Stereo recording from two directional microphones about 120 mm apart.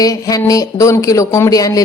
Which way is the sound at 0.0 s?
30° left (ahead or behind).